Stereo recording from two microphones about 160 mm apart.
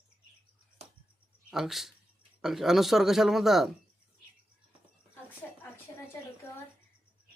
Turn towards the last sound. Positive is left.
turn(degrees=5)  # may be behind; listen again after turning